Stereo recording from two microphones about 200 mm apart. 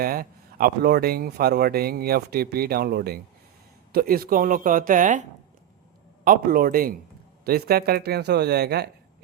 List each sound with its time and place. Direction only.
0.0 s speech: 45° right (ahead or behind)
6.2 s speech: 45° right (ahead or behind)